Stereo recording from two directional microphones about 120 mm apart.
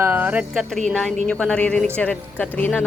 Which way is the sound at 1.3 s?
10° left (ahead or behind).